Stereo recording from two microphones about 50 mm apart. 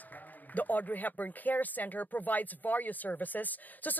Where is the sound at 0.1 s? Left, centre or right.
Left.